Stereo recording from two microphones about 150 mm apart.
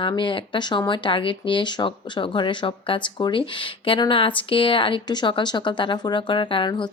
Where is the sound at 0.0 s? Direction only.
35° left (ahead or behind).